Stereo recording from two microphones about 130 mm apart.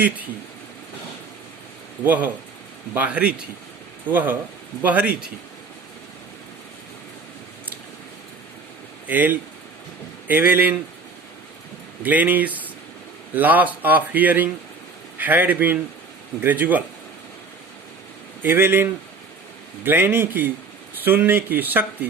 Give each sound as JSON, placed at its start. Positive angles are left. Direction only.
{"t": 2.0, "sound": "speech", "side_deg": -10}
{"t": 9.0, "sound": "speech", "side_deg": -15}
{"t": 12.0, "sound": "speech", "side_deg": -15}
{"t": 18.4, "sound": "speech", "side_deg": -15}